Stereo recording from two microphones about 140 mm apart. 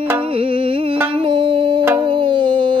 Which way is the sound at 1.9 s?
35° right (ahead or behind).